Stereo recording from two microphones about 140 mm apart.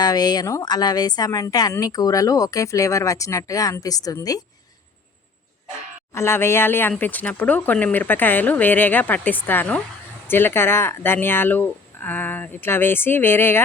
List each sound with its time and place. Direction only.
0.0 s speech: 25° left (ahead or behind)
6.1 s speech: 20° left (ahead or behind)